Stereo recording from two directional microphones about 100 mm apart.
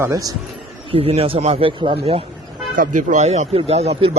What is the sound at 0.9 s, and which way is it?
Speech, 75° right (ahead or behind).